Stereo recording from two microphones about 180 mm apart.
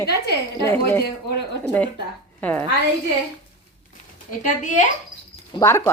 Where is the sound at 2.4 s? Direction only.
10° left (ahead or behind).